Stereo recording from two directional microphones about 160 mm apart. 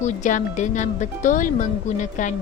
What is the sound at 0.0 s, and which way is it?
Speech, 50° left (ahead or behind).